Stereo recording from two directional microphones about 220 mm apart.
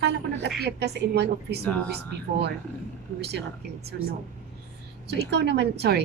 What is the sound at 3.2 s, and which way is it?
A woman's voice, 50° right (ahead or behind).